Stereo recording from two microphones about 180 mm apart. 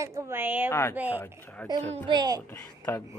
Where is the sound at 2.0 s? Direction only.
25° right (ahead or behind).